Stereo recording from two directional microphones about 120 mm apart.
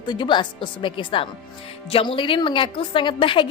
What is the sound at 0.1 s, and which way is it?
A woman's voice, 40° left (ahead or behind).